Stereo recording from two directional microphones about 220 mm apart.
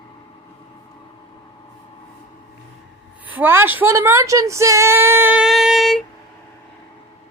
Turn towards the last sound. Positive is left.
turn(degrees=0)  # may be behind; listen again after turning